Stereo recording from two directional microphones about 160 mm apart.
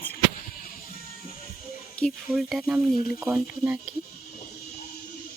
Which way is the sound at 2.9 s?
65° left (ahead or behind).